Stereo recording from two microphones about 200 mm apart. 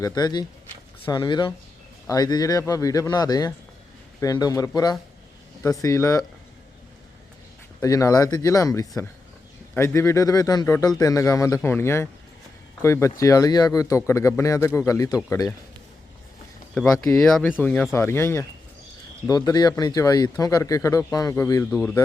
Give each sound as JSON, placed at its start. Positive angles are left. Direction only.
{"t": 0.0, "sound": "speech", "side_deg": 20}
{"t": 7.8, "sound": "speech", "side_deg": 15}
{"t": 17.0, "sound": "speech", "side_deg": 15}